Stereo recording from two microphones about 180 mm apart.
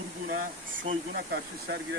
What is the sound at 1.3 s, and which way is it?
Speech, 70° right (ahead or behind).